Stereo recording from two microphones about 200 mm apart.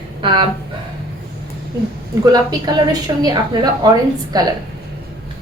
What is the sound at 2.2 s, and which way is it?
A woman's voice, 20° right (ahead or behind).